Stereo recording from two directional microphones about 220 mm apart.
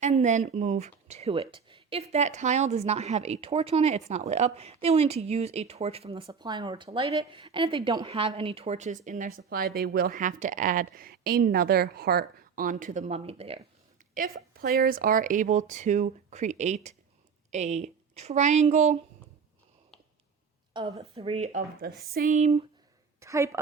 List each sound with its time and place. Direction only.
0.0 s speech: 35° right (ahead or behind)
14.1 s speech: 40° right (ahead or behind)
20.7 s speech: 25° right (ahead or behind)
23.2 s a woman's voice: 15° right (ahead or behind)